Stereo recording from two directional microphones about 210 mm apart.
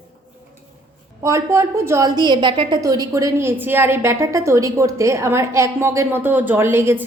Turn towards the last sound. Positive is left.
turn(degrees=-10)  # may be behind; listen again after turning